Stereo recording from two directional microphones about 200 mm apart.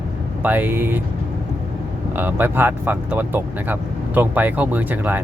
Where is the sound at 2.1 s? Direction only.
10° right (ahead or behind).